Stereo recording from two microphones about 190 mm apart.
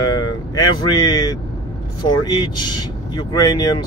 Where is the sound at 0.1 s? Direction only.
20° left (ahead or behind).